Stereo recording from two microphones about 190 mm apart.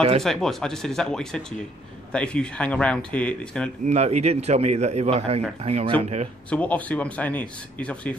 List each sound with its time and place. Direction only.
0.2 s speech: centre (ahead or behind)
3.8 s a man's voice: 35° right (ahead or behind)
6.5 s a man's voice: 5° left (ahead or behind)